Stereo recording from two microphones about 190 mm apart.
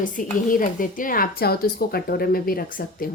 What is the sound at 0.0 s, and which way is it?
A woman's voice, 45° left (ahead or behind).